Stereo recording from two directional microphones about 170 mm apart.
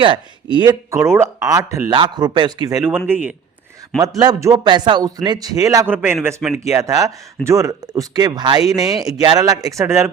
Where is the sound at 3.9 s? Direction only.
20° right (ahead or behind).